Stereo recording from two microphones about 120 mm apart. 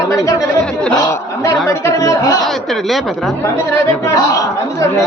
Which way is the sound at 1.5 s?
25° left (ahead or behind).